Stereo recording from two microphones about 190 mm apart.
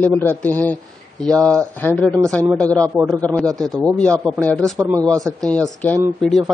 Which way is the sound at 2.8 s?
15° right (ahead or behind).